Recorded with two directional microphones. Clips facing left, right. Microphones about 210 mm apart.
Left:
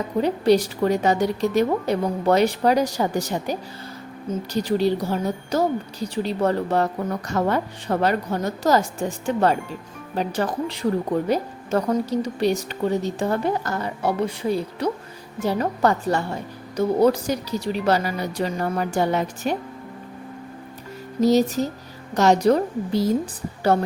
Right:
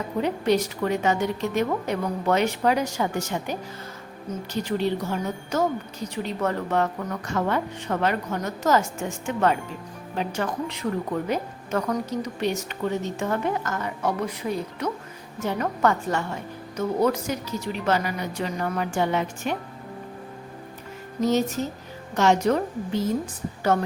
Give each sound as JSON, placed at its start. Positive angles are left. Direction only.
{"t": 0.2, "sound": "a woman's voice", "side_deg": 35}
{"t": 21.2, "sound": "a woman's voice", "side_deg": 35}